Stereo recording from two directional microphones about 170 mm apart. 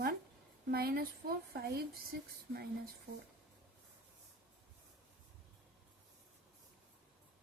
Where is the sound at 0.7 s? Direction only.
65° right (ahead or behind).